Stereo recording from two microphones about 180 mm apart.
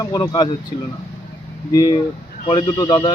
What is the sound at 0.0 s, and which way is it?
Speech, 20° left (ahead or behind).